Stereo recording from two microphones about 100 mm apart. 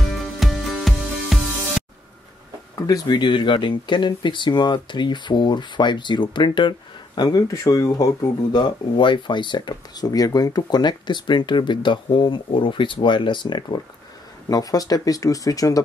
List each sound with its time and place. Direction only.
0.0 s music: centre (ahead or behind)
3.1 s speech: 50° left (ahead or behind)
7.2 s speech: 35° left (ahead or behind)
14.5 s speech: 40° left (ahead or behind)